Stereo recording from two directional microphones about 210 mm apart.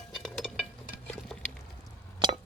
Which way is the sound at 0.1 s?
Centre (ahead or behind).